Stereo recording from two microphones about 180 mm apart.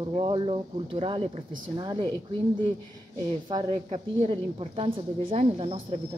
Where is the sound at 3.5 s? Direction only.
25° right (ahead or behind).